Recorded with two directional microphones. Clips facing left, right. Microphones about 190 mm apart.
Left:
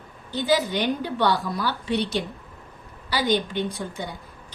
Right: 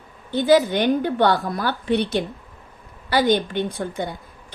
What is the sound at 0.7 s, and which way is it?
A woman's voice, 55° right (ahead or behind).